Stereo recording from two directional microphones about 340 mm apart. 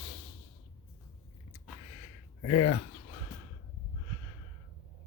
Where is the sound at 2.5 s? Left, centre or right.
Left.